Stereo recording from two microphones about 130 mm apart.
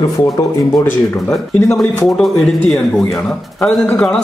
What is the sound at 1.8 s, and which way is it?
A man's voice, 5° left (ahead or behind).